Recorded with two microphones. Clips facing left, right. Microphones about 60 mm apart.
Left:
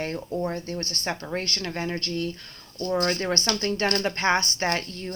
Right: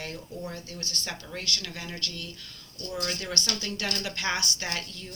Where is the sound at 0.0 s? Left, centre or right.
Left.